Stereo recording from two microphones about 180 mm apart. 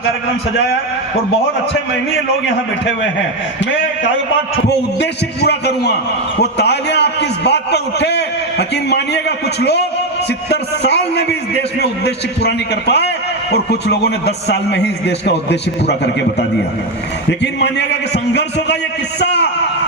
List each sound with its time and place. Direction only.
4.9 s a man's voice: 70° left (ahead or behind)
17.2 s a man's voice: 75° left (ahead or behind)
19.2 s a sound: 70° left (ahead or behind)